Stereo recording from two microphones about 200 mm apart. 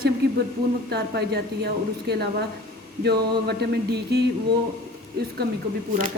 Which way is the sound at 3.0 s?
55° right (ahead or behind).